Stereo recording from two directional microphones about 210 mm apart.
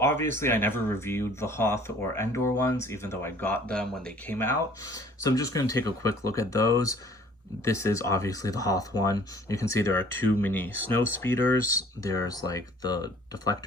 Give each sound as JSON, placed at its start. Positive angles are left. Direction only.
{"t": 0.0, "sound": "speech", "side_deg": 10}